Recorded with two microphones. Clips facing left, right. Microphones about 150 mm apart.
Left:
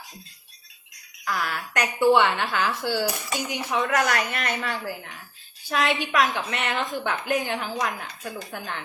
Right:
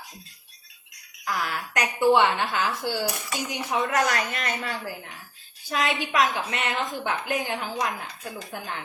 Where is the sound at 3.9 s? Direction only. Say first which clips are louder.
Left 1 dB; 30° right (ahead or behind).